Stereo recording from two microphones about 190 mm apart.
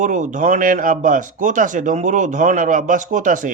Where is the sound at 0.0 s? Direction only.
40° right (ahead or behind).